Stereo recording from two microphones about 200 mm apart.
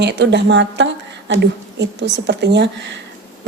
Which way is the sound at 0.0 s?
60° right (ahead or behind).